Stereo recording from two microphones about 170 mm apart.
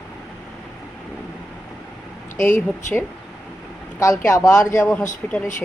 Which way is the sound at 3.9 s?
20° left (ahead or behind).